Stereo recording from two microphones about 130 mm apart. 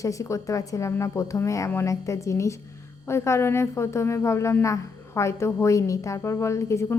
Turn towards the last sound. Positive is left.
turn(degrees=20)  # may be behind; listen again after turning